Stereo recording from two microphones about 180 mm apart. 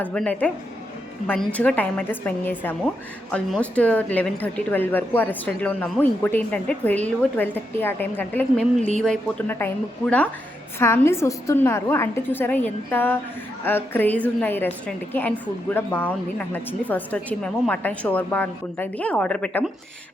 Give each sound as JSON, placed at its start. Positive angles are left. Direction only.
{"t": 0.0, "sound": "a woman's voice", "side_deg": 5}